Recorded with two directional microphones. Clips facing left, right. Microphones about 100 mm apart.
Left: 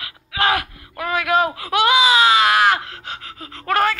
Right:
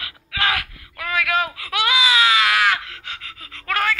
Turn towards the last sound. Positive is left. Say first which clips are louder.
# left 4 dB
turn(degrees=35)  # may be behind; listen again after turning